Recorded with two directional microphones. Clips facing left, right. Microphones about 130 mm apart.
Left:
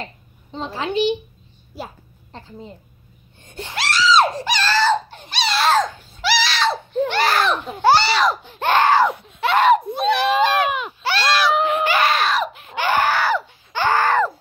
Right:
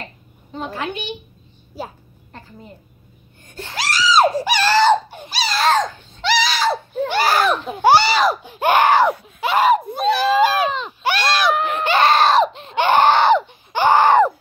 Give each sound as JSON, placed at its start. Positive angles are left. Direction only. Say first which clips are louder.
{"t": 0.7, "sound": "a woman's voice", "louder": "left 10 dB", "side_deg": 25}
{"t": 3.4, "sound": "gasp", "louder": "left 1 dB", "side_deg": 20}
{"t": 3.7, "sound": "screaming", "louder": "even", "side_deg": 0}
{"t": 5.3, "sound": "a sound", "louder": "even", "side_deg": 0}
{"t": 7.8, "sound": "speech", "louder": "right 2 dB", "side_deg": -10}
{"t": 8.5, "sound": "speech", "louder": "right 2 dB", "side_deg": -10}
{"t": 9.4, "sound": "speech", "louder": "left 1 dB", "side_deg": 0}
{"t": 11.0, "sound": "a sound", "louder": "right 1 dB", "side_deg": -15}
{"t": 11.5, "sound": "a sound", "louder": "left 2 dB", "side_deg": 20}
{"t": 11.8, "sound": "screaming", "louder": "right 4 dB", "side_deg": -25}